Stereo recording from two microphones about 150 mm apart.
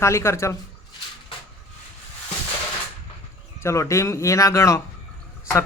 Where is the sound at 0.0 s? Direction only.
20° left (ahead or behind).